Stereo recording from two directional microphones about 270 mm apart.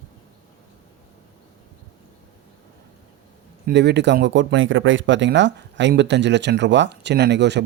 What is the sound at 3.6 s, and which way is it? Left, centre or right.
Speech, right.